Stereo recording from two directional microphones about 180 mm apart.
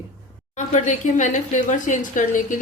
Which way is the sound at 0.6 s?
40° left (ahead or behind).